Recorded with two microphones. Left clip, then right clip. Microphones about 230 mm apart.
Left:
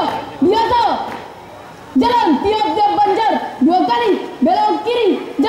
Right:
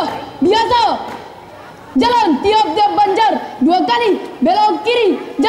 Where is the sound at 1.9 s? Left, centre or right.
Centre.